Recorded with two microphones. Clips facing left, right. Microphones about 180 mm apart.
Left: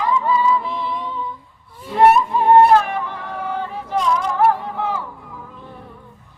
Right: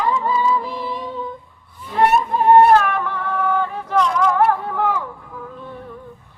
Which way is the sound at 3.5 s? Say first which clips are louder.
Right 1 dB; 55° right (ahead or behind).